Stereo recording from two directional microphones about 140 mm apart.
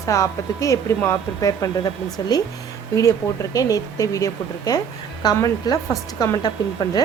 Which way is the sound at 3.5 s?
25° left (ahead or behind).